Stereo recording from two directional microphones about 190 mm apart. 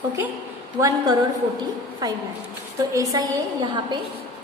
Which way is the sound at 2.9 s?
15° right (ahead or behind).